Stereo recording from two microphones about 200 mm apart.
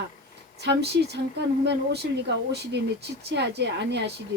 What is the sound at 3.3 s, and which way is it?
Speech, 55° right (ahead or behind).